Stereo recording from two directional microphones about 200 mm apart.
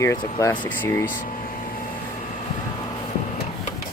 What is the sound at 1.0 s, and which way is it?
Speech, 40° left (ahead or behind).